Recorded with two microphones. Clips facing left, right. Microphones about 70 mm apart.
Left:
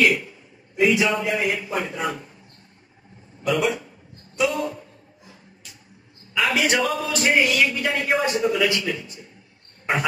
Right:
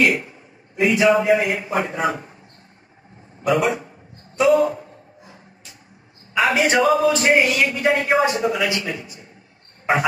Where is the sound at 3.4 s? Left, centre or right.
Right.